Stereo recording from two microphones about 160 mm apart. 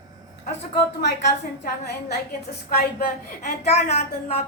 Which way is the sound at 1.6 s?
90° left.